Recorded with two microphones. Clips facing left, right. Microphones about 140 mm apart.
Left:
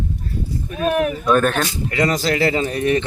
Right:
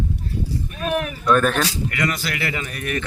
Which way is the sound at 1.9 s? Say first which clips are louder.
Left 6 dB; 30° left (ahead or behind).